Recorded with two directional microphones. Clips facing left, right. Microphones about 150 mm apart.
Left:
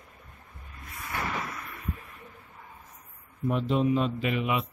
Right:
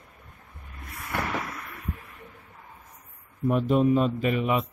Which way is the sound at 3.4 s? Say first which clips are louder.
Right 4 dB; 50° right (ahead or behind).